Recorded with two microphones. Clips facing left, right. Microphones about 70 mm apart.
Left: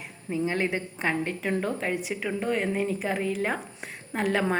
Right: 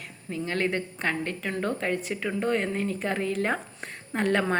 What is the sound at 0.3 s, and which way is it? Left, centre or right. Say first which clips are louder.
A woman's voice: left 1 dB; centre.